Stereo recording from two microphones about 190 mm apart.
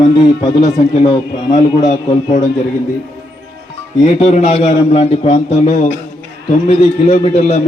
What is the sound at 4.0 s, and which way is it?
A man's voice, 40° left (ahead or behind).